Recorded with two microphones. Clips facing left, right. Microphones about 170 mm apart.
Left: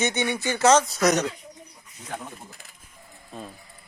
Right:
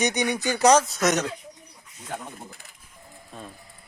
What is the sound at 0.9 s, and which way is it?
Speech, centre (ahead or behind).